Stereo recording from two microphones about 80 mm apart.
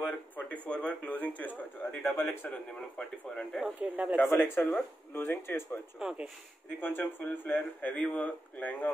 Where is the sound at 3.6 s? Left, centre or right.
Centre.